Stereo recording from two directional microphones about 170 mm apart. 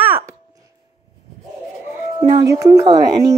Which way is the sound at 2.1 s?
25° right (ahead or behind).